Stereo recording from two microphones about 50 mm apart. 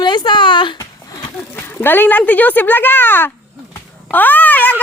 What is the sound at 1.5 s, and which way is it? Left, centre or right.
Speech, left.